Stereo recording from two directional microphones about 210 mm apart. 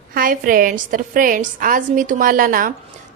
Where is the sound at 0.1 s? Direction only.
40° right (ahead or behind).